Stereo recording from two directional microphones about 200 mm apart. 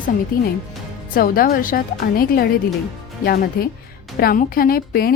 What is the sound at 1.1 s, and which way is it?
A woman's voice, 45° left (ahead or behind).